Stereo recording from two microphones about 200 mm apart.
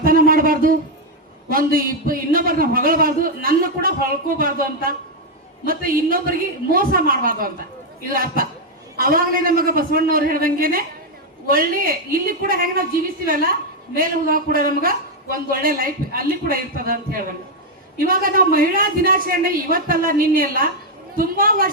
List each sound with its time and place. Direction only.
0.0 s a sound: 45° right (ahead or behind)
1.5 s a man's voice: 45° right (ahead or behind)
13.9 s a man's voice: 45° right (ahead or behind)